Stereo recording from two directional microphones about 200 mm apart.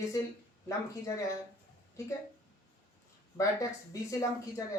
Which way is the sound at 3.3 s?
15° left (ahead or behind).